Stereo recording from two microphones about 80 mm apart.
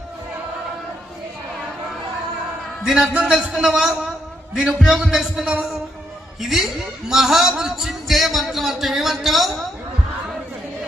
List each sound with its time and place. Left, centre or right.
2.8 s a man's voice: centre